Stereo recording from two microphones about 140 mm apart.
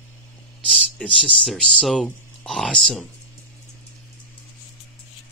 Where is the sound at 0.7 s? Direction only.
5° left (ahead or behind).